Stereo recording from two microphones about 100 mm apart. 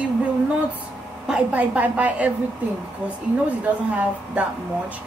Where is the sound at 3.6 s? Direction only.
15° right (ahead or behind).